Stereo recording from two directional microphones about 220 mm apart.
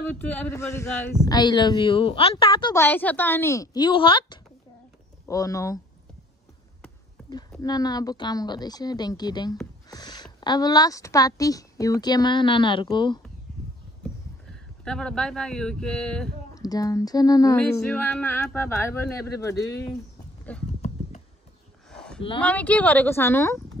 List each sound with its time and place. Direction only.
0.1 s a man's voice: 10° left (ahead or behind)
7.6 s a man's voice: 15° left (ahead or behind)
14.5 s speech: 5° left (ahead or behind)
16.5 s a man's voice: 15° left (ahead or behind)
17.8 s a man's voice: 5° left (ahead or behind)
21.9 s a sound: 5° left (ahead or behind)
22.4 s a man's voice: 5° left (ahead or behind)